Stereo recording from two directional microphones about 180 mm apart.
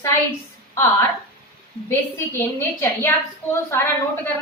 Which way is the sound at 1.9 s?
10° left (ahead or behind).